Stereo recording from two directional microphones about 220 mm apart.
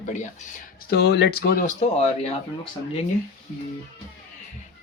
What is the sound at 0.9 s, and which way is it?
Speech, 50° left (ahead or behind).